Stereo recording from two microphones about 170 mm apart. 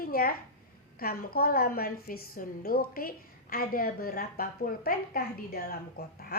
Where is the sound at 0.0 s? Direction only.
60° left (ahead or behind).